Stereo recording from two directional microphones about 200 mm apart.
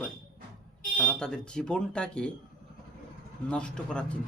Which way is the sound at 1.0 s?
5° left (ahead or behind).